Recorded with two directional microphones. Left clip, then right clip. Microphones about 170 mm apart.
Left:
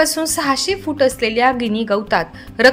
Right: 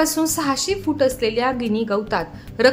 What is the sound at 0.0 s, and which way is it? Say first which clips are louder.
A woman's voice: left 3 dB; 15° left (ahead or behind).